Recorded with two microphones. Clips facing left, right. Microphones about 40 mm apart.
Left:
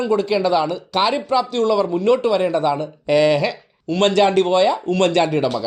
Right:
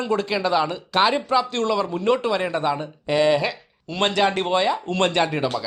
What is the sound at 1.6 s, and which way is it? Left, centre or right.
Speech, right.